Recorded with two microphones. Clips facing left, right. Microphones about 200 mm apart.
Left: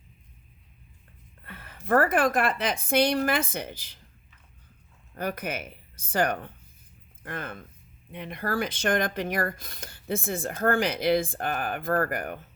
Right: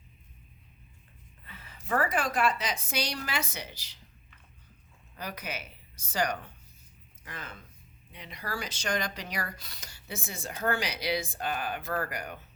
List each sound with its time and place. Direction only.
1.5 s speech: 55° left (ahead or behind)
5.1 s speech: 55° left (ahead or behind)